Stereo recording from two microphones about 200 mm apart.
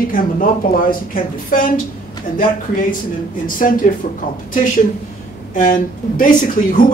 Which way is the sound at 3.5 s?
40° left (ahead or behind).